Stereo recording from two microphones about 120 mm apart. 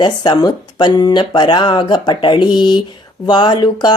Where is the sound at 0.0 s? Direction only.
35° left (ahead or behind).